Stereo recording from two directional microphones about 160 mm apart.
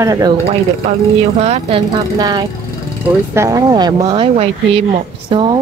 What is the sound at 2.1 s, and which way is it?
Speech, 25° right (ahead or behind).